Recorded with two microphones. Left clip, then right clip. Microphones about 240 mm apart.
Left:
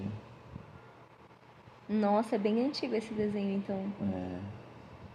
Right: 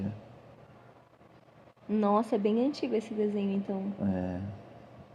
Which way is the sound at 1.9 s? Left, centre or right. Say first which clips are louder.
Right 2 dB; centre.